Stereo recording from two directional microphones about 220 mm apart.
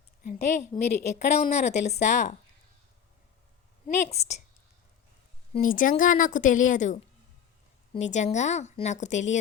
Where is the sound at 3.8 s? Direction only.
30° left (ahead or behind).